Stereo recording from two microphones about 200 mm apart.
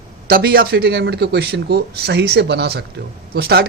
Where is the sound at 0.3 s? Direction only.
50° right (ahead or behind).